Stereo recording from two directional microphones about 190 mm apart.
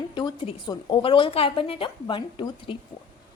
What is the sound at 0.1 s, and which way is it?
A woman's voice, 25° left (ahead or behind).